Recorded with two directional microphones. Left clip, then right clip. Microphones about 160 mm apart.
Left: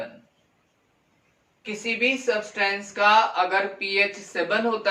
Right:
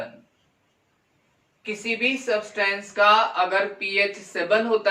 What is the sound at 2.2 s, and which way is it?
Speech, 20° left (ahead or behind).